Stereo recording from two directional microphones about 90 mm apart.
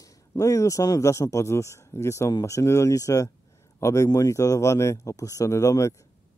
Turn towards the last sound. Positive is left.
turn(degrees=35)  # may be behind; listen again after turning